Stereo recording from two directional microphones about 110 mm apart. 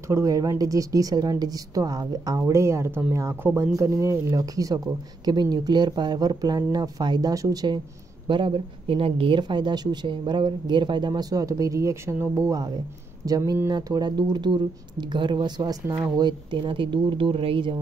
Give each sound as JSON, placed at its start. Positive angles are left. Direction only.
{"t": 0.1, "sound": "speech", "side_deg": -30}